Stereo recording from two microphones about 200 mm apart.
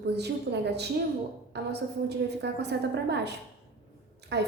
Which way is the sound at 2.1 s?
55° right (ahead or behind).